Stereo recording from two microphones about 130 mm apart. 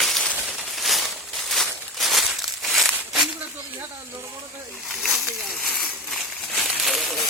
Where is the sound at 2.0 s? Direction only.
Centre (ahead or behind).